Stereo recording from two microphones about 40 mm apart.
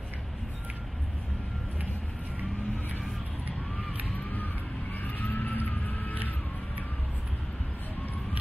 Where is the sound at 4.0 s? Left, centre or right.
Left.